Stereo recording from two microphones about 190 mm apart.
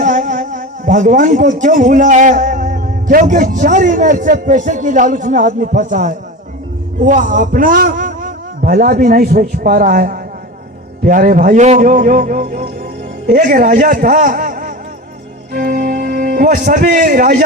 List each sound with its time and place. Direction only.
0.0 s a man's voice: 40° right (ahead or behind)